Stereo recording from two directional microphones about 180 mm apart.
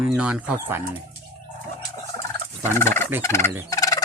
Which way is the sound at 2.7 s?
15° left (ahead or behind).